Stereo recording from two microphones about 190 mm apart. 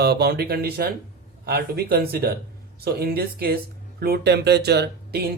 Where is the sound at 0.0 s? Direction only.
60° right (ahead or behind).